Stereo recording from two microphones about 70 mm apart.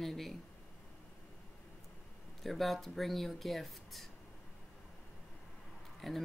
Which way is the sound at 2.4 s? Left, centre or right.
Centre.